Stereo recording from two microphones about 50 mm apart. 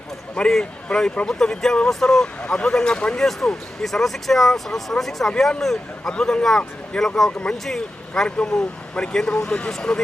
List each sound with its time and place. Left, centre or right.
0.3 s speech: centre
7.6 s speech: centre